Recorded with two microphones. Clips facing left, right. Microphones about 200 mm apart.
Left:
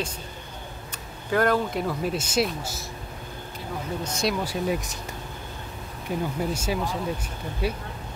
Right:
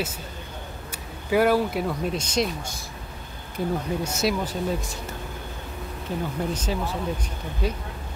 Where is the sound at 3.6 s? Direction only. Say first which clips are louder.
Right 11 dB; 50° right (ahead or behind).